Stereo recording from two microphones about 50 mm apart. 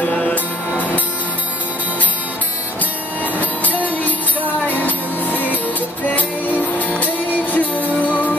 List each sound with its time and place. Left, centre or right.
0.0 s music: left
4.0 s music: left